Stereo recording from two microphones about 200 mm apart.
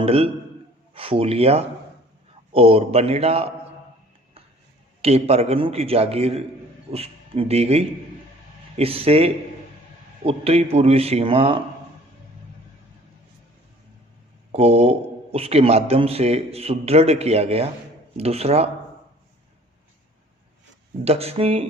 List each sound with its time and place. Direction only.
0.0 s a man's voice: 30° right (ahead or behind)
5.0 s a man's voice: 30° right (ahead or behind)
14.5 s a man's voice: 30° right (ahead or behind)
21.0 s speech: 30° right (ahead or behind)